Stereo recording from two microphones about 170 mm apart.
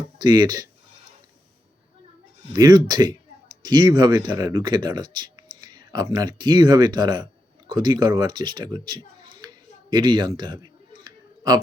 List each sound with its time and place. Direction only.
0.2 s speech: 25° right (ahead or behind)
2.5 s a child's voice: 25° right (ahead or behind)